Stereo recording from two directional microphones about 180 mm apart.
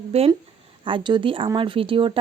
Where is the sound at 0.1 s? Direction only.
35° right (ahead or behind).